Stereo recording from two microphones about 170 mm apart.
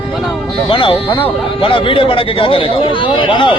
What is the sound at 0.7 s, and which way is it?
A man's voice, 30° left (ahead or behind).